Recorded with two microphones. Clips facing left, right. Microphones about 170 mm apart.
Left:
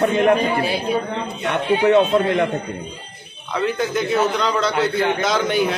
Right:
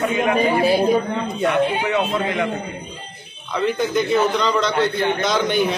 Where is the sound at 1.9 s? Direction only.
50° left (ahead or behind).